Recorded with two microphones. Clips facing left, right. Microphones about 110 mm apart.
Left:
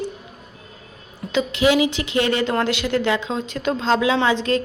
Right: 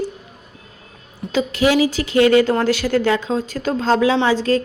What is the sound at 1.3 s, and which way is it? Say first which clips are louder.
Speech: right 1 dB; 40° right (ahead or behind).